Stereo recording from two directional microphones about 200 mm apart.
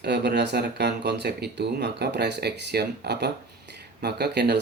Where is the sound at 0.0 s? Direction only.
55° right (ahead or behind).